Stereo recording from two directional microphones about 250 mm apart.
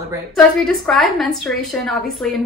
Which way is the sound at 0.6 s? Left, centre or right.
Centre.